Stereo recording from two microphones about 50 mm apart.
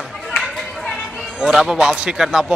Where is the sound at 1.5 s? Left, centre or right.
Centre.